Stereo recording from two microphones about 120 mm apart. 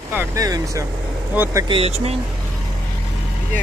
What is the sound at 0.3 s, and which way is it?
Speech, 30° right (ahead or behind).